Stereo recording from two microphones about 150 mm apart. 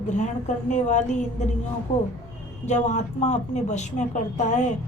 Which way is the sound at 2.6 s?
50° left (ahead or behind).